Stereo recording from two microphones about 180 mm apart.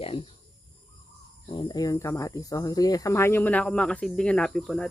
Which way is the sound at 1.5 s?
25° left (ahead or behind).